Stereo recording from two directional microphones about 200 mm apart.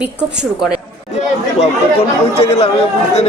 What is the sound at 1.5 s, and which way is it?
Speech, 30° left (ahead or behind).